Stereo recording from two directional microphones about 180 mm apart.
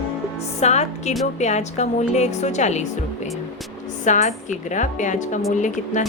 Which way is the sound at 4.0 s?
40° left (ahead or behind).